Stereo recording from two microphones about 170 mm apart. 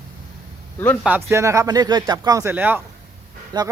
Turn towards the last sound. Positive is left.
turn(degrees=-20)  # may be behind; listen again after turning